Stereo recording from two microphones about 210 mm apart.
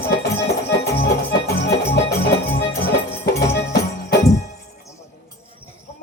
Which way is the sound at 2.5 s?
45° left (ahead or behind).